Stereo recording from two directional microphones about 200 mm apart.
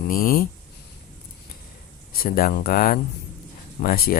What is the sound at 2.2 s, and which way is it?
Speech, 50° left (ahead or behind).